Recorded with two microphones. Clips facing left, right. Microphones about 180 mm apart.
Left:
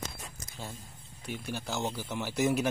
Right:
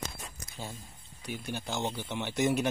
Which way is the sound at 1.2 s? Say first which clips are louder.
Even; centre (ahead or behind).